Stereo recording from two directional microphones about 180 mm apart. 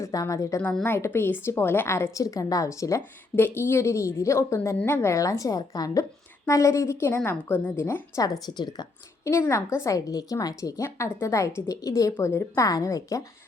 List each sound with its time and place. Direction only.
0.0 s a woman's voice: 20° left (ahead or behind)